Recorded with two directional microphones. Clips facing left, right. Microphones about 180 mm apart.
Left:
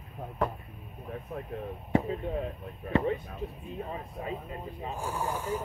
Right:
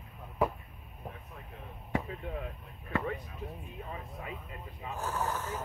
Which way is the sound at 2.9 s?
25° left (ahead or behind).